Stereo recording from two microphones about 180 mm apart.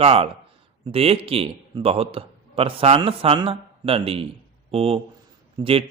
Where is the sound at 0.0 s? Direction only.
35° right (ahead or behind).